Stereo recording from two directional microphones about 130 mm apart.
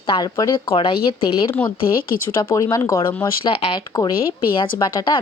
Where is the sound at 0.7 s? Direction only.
45° left (ahead or behind).